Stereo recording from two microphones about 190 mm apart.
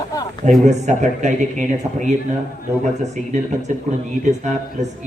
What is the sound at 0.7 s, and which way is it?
A man's voice, 40° right (ahead or behind).